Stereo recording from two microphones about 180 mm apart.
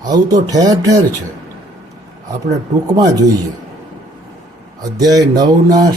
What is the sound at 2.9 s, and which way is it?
Speech, 20° right (ahead or behind).